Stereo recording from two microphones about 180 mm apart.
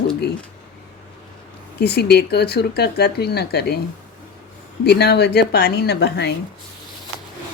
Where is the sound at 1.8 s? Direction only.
65° left (ahead or behind).